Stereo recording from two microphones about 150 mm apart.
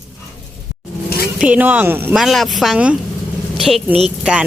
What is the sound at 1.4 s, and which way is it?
Speech, 10° right (ahead or behind).